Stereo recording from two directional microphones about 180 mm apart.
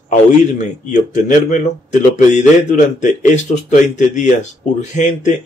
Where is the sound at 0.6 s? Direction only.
40° left (ahead or behind).